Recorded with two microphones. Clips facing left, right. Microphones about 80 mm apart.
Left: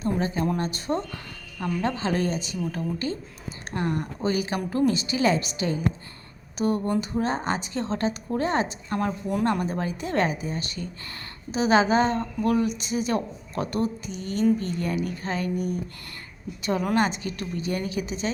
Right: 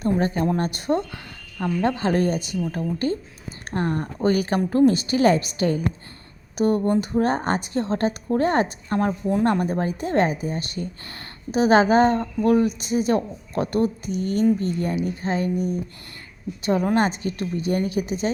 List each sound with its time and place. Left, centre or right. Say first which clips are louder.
0.0 s a woman's voice: right 4 dB; right
1.5 s a woman's voice: right 4 dB; right
2.0 s a woman's voice: right 4 dB; right
3.7 s a woman's voice: right 3 dB; right
4.3 s a woman's voice: right 6 dB; right
6.6 s a woman's voice: right 5 dB; right
7.2 s a woman's voice: right 4 dB; right
9.3 s a woman's voice: right 4 dB; right
12.2 s a woman's voice: right 5 dB; right